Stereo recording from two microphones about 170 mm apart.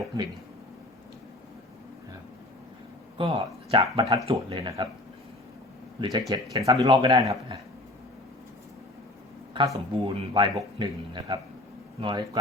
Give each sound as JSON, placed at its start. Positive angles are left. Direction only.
{"t": 3.2, "sound": "a man's voice", "side_deg": -30}
{"t": 6.0, "sound": "a man's voice", "side_deg": -20}
{"t": 9.6, "sound": "a man's voice", "side_deg": -20}